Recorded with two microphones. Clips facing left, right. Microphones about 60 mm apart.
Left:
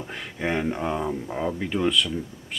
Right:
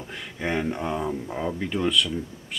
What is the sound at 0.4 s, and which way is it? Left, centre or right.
Speech, centre.